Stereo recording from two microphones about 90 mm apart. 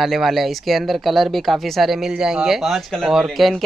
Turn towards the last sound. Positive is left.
turn(degrees=0)  # may be behind; listen again after turning